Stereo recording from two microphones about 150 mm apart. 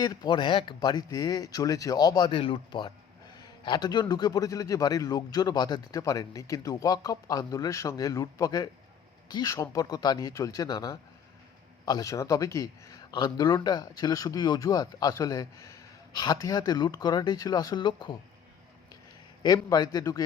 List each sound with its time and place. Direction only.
0.0 s speech: 25° left (ahead or behind)
19.4 s speech: 25° left (ahead or behind)